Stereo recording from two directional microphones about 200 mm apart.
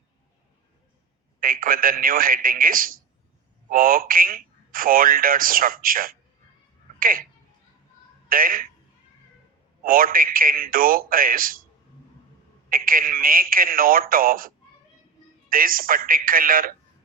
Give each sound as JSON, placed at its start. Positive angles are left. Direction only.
{"t": 1.4, "sound": "a man's voice", "side_deg": -45}
{"t": 8.3, "sound": "a man's voice", "side_deg": -45}
{"t": 9.8, "sound": "a man's voice", "side_deg": -45}
{"t": 12.7, "sound": "a man's voice", "side_deg": -45}